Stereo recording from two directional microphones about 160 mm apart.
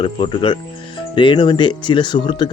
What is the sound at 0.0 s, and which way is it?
Speech, 30° left (ahead or behind).